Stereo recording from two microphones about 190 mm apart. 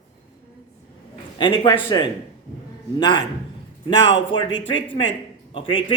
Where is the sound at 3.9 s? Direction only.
70° left (ahead or behind).